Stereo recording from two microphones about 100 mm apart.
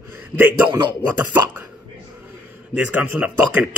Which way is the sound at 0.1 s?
20° right (ahead or behind).